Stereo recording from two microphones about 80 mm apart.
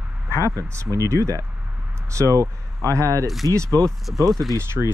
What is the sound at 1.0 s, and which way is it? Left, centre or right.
Speech, right.